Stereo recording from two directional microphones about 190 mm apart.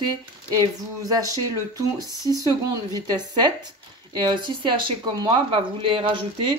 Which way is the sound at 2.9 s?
20° right (ahead or behind).